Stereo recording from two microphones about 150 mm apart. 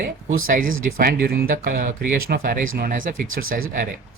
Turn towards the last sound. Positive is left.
turn(degrees=-70)  # may be behind; listen again after turning